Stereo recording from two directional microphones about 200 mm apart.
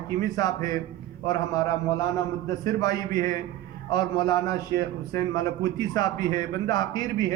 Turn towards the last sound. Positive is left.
turn(degrees=20)  # may be behind; listen again after turning